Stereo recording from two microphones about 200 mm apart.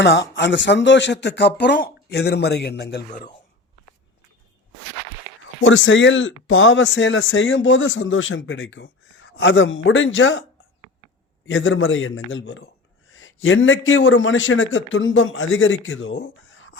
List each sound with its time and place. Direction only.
0.0 s speech: 60° left (ahead or behind)
5.6 s a man's voice: 75° left (ahead or behind)
11.4 s a man's voice: 70° left (ahead or behind)